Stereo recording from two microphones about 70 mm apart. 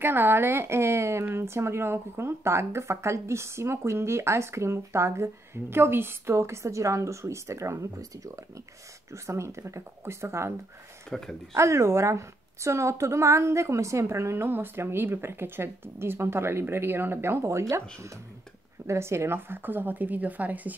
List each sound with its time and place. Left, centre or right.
0.0 s speech: right
11.1 s speech: centre
11.5 s a woman's voice: right